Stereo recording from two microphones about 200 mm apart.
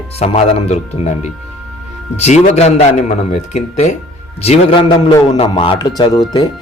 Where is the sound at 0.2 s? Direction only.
30° left (ahead or behind).